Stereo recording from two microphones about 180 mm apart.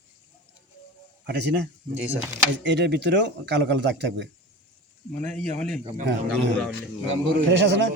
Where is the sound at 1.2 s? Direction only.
70° right (ahead or behind).